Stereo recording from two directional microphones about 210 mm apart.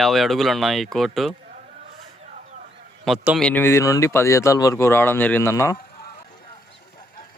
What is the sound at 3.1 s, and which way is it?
Speech, centre (ahead or behind).